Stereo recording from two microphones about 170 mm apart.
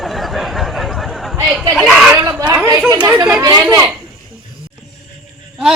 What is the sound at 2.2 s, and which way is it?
Speech, 15° right (ahead or behind).